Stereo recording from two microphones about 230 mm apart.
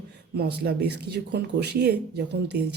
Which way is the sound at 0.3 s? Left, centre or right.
Right.